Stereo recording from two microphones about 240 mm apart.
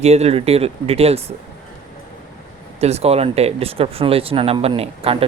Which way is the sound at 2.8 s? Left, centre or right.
Right.